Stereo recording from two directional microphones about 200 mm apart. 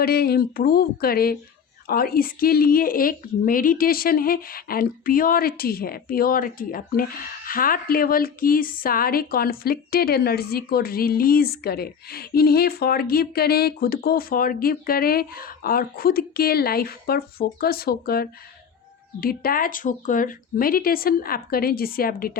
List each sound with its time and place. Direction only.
0.0 s a woman's voice: 50° left (ahead or behind)